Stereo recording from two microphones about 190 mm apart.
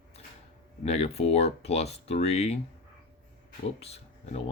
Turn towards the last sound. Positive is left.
turn(degrees=35)  # may be behind; listen again after turning